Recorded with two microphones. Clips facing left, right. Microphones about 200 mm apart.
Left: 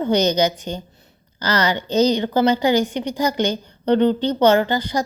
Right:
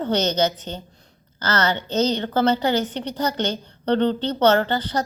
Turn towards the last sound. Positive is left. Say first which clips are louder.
# left 2 dB
turn(degrees=10)  # may be behind; listen again after turning